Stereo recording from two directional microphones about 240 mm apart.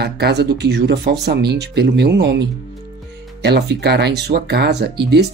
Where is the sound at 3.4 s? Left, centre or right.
Right.